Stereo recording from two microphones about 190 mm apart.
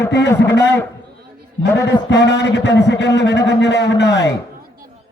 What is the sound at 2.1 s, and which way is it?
A man's voice, 70° left (ahead or behind).